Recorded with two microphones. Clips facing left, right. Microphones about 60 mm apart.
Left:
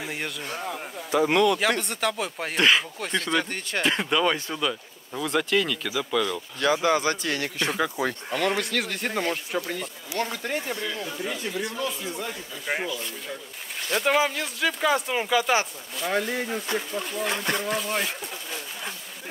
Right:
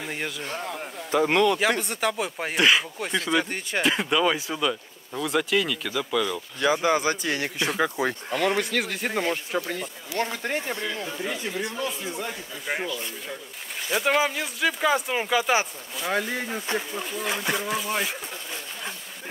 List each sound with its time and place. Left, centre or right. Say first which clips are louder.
0.0 s speech: right 1 dB; centre
1.1 s speech: even; right
1.6 s speech: right 1 dB; centre
10.4 s speech: right 1 dB; right
11.1 s speech: right 1 dB; centre
12.7 s speech: even; centre